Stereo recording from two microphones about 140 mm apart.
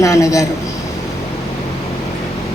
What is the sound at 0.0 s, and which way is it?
Speech, 25° left (ahead or behind).